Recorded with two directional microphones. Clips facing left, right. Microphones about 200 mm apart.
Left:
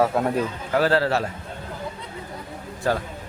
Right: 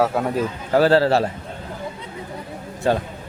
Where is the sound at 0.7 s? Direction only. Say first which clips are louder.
Right 5 dB; 30° right (ahead or behind).